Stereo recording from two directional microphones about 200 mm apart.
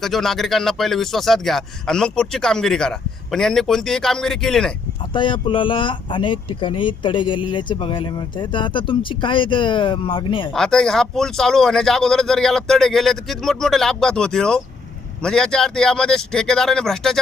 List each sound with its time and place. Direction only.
0.0 s speech: centre (ahead or behind)
5.1 s speech: 25° left (ahead or behind)
10.5 s speech: 5° left (ahead or behind)